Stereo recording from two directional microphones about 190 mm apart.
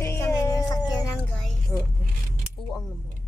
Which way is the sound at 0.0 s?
15° left (ahead or behind).